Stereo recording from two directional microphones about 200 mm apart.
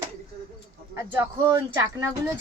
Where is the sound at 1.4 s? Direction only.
15° right (ahead or behind).